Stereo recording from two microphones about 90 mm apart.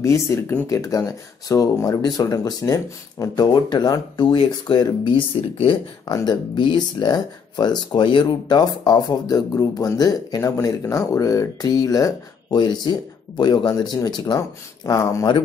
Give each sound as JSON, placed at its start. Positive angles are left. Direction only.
{"t": 0.0, "sound": "speech", "side_deg": 30}
{"t": 3.5, "sound": "speech", "side_deg": 55}
{"t": 6.0, "sound": "speech", "side_deg": 45}
{"t": 14.9, "sound": "speech", "side_deg": 35}